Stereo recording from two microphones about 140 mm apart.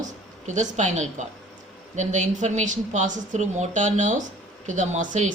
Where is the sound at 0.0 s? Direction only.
60° right (ahead or behind).